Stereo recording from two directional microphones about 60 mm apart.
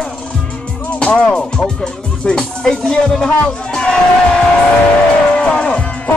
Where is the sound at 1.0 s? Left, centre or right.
Centre.